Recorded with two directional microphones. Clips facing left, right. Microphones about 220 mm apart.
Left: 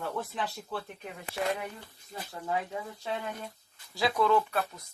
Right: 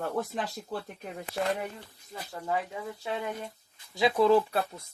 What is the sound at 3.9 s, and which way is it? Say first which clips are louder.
Speech: right 4 dB; 25° right (ahead or behind).